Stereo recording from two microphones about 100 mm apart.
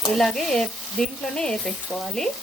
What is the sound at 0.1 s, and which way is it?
Speech, 5° left (ahead or behind).